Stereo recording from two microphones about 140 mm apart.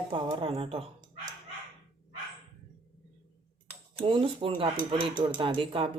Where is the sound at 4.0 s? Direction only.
40° right (ahead or behind).